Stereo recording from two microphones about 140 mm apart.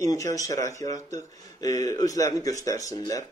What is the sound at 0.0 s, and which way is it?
Speech, 25° left (ahead or behind).